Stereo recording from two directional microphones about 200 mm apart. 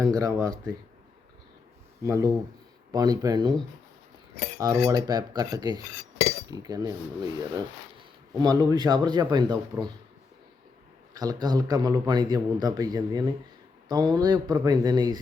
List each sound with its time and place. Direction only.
0.0 s speech: 15° right (ahead or behind)
2.0 s a man's voice: 15° right (ahead or behind)
4.5 s a man's voice: 15° right (ahead or behind)
11.1 s a man's voice: 20° right (ahead or behind)